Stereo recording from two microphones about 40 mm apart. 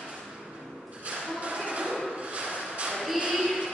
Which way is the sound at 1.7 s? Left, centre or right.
Right.